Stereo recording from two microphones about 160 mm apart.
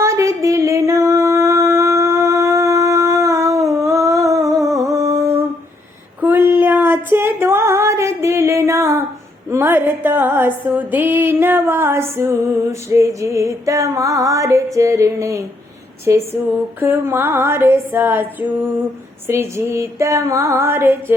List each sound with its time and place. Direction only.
0.0 s singing: 20° right (ahead or behind)
6.1 s female singing: 15° right (ahead or behind)
9.5 s music: 15° right (ahead or behind)